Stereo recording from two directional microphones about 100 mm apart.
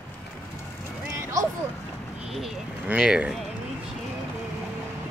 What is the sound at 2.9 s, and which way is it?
Speech, 10° right (ahead or behind).